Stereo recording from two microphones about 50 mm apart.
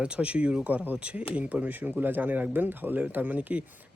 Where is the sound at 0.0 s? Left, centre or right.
Right.